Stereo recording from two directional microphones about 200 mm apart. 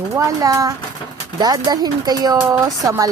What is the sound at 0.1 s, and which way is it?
Speech, 15° right (ahead or behind).